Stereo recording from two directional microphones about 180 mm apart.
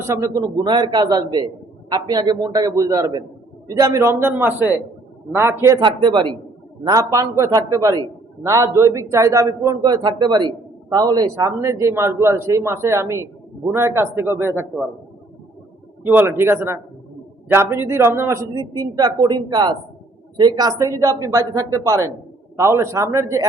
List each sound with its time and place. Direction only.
0.0 s a man's voice: 15° right (ahead or behind)
5.8 s a man's voice: 25° right (ahead or behind)
16.0 s a man's voice: 10° right (ahead or behind)